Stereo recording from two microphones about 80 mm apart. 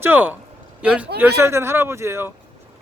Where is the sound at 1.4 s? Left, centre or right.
Right.